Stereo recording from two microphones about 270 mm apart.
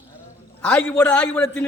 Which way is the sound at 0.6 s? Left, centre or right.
Centre.